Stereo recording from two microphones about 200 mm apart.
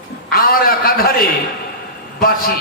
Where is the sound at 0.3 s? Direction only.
45° left (ahead or behind).